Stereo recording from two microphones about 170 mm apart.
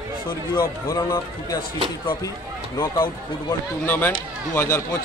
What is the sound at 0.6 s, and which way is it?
A man's voice, 20° left (ahead or behind).